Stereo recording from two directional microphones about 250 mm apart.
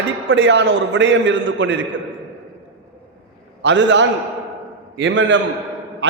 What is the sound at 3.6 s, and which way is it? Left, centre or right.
A man's voice, right.